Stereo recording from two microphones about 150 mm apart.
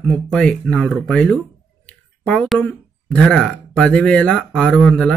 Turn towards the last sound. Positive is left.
turn(degrees=5)  # may be behind; listen again after turning